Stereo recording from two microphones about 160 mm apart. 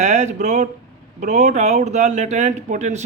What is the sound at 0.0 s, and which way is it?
A man's voice, 45° right (ahead or behind).